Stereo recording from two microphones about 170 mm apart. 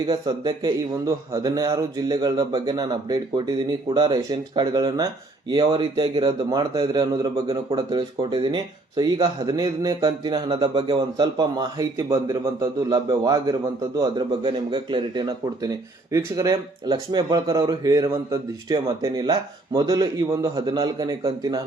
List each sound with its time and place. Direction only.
0.1 s speech: 25° right (ahead or behind)